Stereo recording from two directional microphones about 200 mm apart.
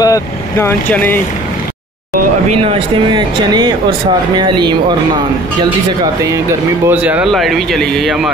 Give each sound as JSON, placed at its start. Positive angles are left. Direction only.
{"t": 0.0, "sound": "speech", "side_deg": 15}
{"t": 2.6, "sound": "speech", "side_deg": -20}
{"t": 6.9, "sound": "a man's voice", "side_deg": -5}